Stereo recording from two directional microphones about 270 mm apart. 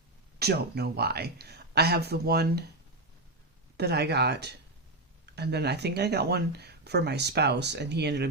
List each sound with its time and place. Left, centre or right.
0.3 s speech: right
3.8 s speech: right